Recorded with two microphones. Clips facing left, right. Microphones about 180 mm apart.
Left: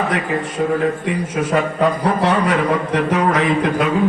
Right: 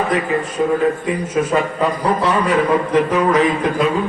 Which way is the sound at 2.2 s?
70° left (ahead or behind).